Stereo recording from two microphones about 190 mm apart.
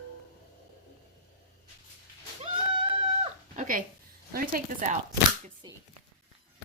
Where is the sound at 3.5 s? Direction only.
45° right (ahead or behind).